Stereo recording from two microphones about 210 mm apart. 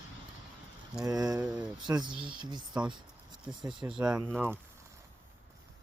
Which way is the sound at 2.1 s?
25° right (ahead or behind).